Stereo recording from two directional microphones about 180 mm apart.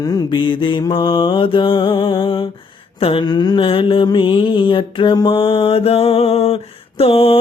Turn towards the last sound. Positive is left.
turn(degrees=30)  # may be behind; listen again after turning